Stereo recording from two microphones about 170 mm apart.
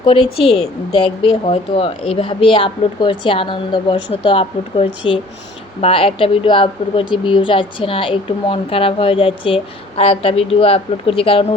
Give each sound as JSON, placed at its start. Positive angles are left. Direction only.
{"t": 0.0, "sound": "a woman's voice", "side_deg": 35}